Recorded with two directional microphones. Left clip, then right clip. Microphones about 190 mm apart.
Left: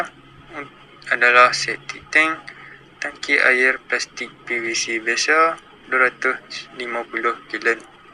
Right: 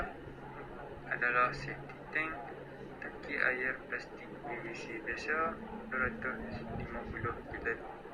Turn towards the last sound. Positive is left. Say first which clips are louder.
# left 17 dB
turn(degrees=55)  # may be behind; listen again after turning